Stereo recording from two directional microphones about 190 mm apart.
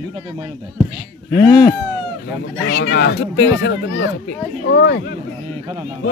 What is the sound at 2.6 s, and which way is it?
A child's voice, 65° left (ahead or behind).